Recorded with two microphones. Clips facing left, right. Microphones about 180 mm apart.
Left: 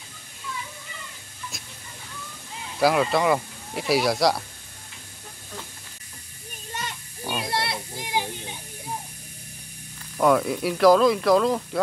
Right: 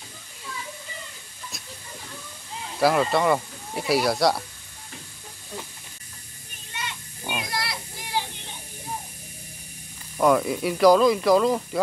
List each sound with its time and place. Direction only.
2.8 s speech: centre (ahead or behind)
6.7 s children playing: 40° left (ahead or behind)
7.3 s children playing: 30° left (ahead or behind)
10.1 s speech: centre (ahead or behind)